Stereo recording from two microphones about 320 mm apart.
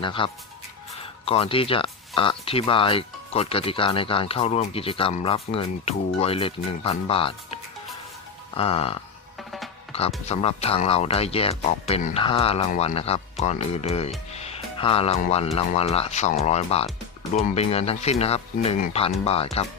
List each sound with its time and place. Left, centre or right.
0.0 s speech: centre
8.5 s speech: centre
10.2 s speech: centre
14.3 s music: centre
15.5 s speech: centre